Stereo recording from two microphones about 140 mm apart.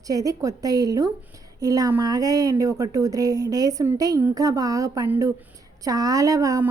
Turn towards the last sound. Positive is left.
turn(degrees=-25)  # may be behind; listen again after turning